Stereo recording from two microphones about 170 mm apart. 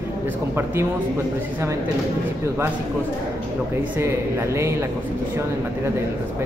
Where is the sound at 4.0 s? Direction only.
15° right (ahead or behind).